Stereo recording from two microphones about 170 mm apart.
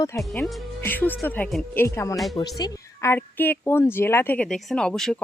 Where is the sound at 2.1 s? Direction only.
Centre (ahead or behind).